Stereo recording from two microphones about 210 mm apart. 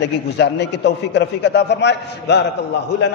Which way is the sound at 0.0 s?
55° left (ahead or behind).